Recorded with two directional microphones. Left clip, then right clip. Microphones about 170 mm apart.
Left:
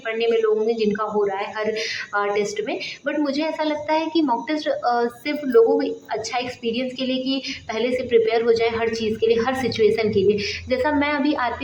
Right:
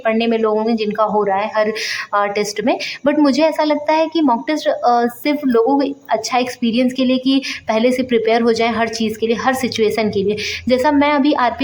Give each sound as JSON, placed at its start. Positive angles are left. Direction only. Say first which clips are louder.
{"t": 0.0, "sound": "a woman's voice", "louder": "right 4 dB", "side_deg": -45}